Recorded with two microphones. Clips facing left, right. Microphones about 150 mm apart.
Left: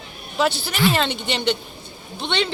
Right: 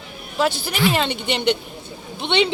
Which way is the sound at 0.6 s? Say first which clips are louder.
Even; 10° right (ahead or behind).